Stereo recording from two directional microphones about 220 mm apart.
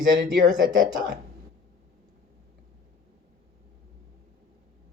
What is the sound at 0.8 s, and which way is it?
Speech, 40° right (ahead or behind).